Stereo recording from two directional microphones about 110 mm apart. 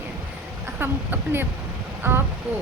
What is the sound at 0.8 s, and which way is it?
Speech, 20° right (ahead or behind).